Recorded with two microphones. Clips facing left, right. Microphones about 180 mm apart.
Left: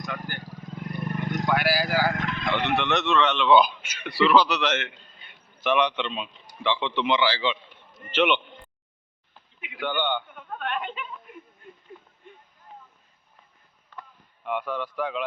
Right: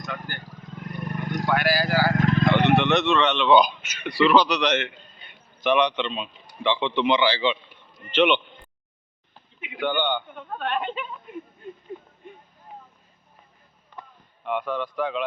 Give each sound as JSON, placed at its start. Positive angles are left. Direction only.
{"t": 0.1, "sound": "vehicle", "side_deg": 10}
{"t": 2.2, "sound": "vehicle", "side_deg": -40}
{"t": 2.7, "sound": "a man's voice", "side_deg": 0}
{"t": 9.6, "sound": "a sound", "side_deg": -25}
{"t": 10.0, "sound": "speech", "side_deg": 5}
{"t": 10.3, "sound": "a woman's voice", "side_deg": -30}
{"t": 11.3, "sound": "a sound", "side_deg": -25}
{"t": 14.4, "sound": "a man's voice", "side_deg": 10}